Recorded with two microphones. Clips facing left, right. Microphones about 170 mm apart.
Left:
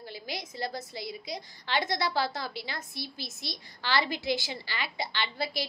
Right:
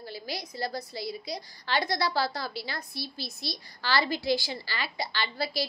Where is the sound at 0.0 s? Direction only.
20° left (ahead or behind).